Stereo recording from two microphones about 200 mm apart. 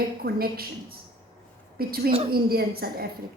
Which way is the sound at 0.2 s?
50° right (ahead or behind).